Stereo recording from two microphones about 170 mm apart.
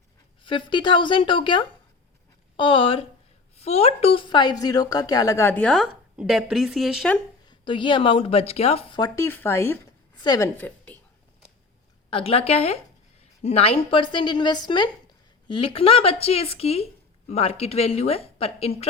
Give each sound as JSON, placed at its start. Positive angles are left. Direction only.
{"t": 0.4, "sound": "a woman's voice", "side_deg": 30}
{"t": 7.4, "sound": "speech", "side_deg": 30}
{"t": 9.0, "sound": "a woman's voice", "side_deg": 20}
{"t": 10.9, "sound": "a sound", "side_deg": 10}
{"t": 12.1, "sound": "a woman's voice", "side_deg": 35}